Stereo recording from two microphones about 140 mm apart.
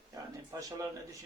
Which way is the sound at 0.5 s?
25° right (ahead or behind).